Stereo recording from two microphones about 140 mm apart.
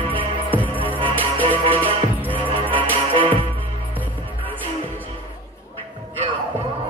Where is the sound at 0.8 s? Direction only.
35° right (ahead or behind).